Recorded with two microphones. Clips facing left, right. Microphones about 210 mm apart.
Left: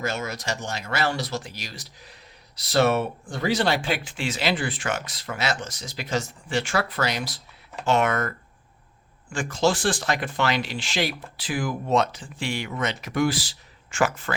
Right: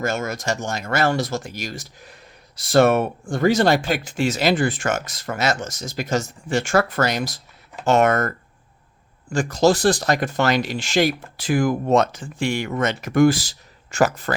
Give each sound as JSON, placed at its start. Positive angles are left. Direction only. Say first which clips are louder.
{"t": 0.0, "sound": "speech", "louder": "right 5 dB", "side_deg": -50}
{"t": 9.3, "sound": "speech", "louder": "right 6 dB", "side_deg": -40}